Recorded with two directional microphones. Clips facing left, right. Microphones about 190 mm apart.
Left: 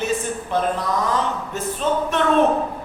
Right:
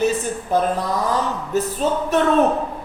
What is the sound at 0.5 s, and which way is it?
Speech, 40° right (ahead or behind).